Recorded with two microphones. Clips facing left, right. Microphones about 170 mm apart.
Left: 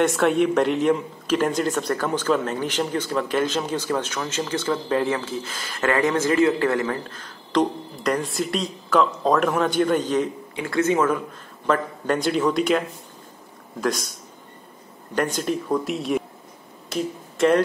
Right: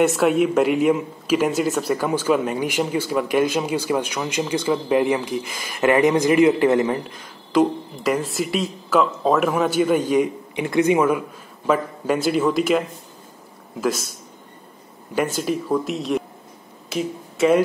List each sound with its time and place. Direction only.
0.0 s speech: 5° right (ahead or behind)
15.1 s speech: 5° right (ahead or behind)